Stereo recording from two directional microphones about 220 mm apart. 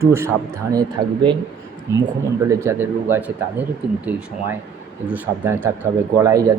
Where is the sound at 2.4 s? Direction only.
10° right (ahead or behind).